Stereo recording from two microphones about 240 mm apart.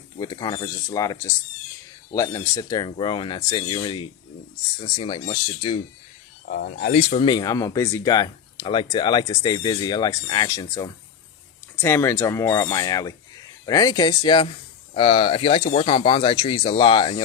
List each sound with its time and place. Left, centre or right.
0.2 s speech: centre
6.5 s speech: left; by 17.2 s centre